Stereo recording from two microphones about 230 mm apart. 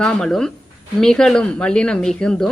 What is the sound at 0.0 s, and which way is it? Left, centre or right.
Speech, centre.